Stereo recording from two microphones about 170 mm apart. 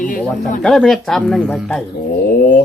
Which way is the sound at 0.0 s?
50° left (ahead or behind).